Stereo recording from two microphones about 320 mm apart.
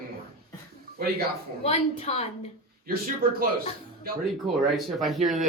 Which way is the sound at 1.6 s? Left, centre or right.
Centre.